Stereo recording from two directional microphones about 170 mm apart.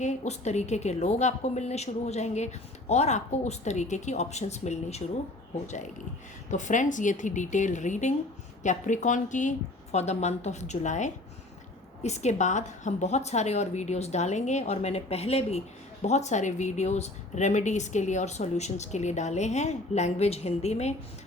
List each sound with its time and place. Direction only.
0.0 s a woman's voice: 40° left (ahead or behind)